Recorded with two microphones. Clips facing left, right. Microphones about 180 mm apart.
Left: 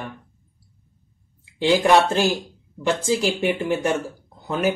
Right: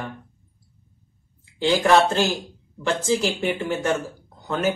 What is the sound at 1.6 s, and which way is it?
Speech, 10° left (ahead or behind).